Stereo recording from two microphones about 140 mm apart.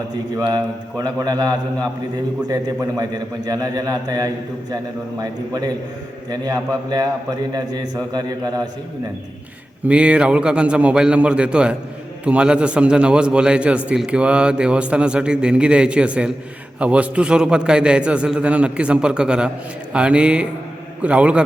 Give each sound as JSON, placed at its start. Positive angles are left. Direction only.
{"t": 0.3, "sound": "a man's voice", "side_deg": -25}
{"t": 3.0, "sound": "a man's voice", "side_deg": -25}
{"t": 9.8, "sound": "a man's voice", "side_deg": -10}